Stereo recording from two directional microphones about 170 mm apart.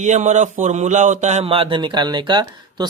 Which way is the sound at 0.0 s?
45° right (ahead or behind).